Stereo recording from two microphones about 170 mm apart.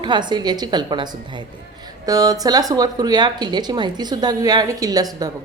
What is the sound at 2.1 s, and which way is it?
Speech, 20° right (ahead or behind).